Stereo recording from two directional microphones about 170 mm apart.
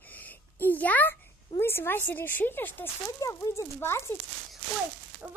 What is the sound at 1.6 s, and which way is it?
Speech, 15° left (ahead or behind).